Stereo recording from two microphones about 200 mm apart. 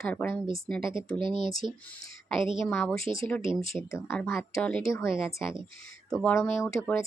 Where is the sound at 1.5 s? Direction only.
Centre (ahead or behind).